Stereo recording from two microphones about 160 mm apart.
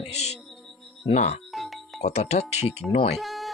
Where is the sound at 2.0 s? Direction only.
45° left (ahead or behind).